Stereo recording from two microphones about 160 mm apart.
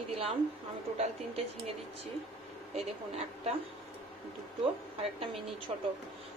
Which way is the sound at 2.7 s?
40° right (ahead or behind).